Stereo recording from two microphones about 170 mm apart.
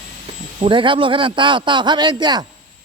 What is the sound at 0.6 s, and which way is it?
A man's voice, 30° right (ahead or behind).